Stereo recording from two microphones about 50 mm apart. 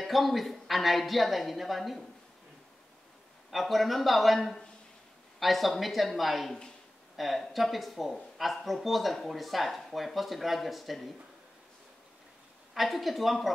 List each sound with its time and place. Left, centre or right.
0.0 s speech: centre
3.4 s speech: centre
12.7 s speech: centre